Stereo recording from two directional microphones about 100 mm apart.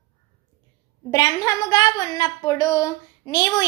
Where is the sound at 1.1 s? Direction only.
40° left (ahead or behind).